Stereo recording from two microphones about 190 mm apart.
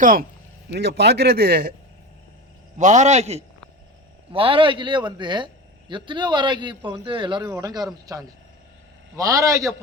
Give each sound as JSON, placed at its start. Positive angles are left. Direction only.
{"t": 0.0, "sound": "speech", "side_deg": -45}
{"t": 0.7, "sound": "a man's voice", "side_deg": -60}
{"t": 2.7, "sound": "a man's voice", "side_deg": -40}